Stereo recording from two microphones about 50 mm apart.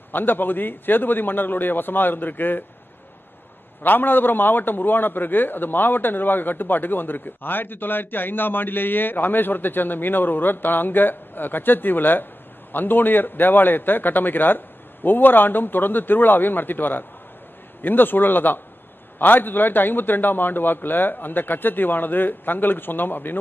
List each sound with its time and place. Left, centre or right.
0.1 s a man's voice: left
3.8 s a man's voice: left